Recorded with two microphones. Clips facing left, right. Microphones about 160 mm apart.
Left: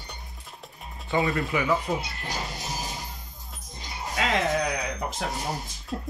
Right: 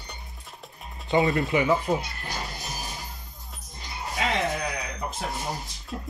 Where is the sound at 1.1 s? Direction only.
Centre (ahead or behind).